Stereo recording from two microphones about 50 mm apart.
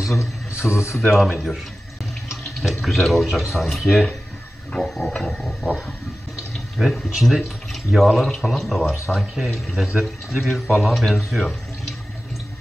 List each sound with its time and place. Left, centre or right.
0.2 s a man's voice: left
1.0 s speech: centre
2.6 s speech: centre
4.7 s a sound: centre
6.8 s speech: centre
7.2 s speech: centre
9.2 s speech: centre
9.5 s speech: centre